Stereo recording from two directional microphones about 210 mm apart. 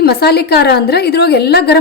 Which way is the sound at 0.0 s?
50° left (ahead or behind).